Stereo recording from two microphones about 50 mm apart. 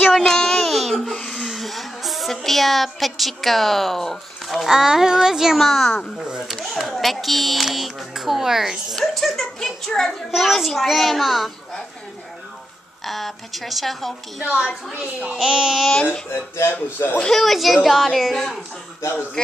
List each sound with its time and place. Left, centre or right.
0.1 s child singing: centre
1.3 s a sound: centre
2.4 s a woman's voice: centre
5.6 s a woman's voice: centre
13.0 s a woman's voice: centre
14.4 s a child's voice: right
15.3 s speech: centre
15.9 s speech: left
16.3 s speech: left
17.2 s a woman's voice: centre